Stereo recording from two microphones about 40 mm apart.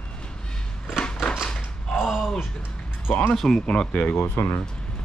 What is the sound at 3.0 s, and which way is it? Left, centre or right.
Speech, left.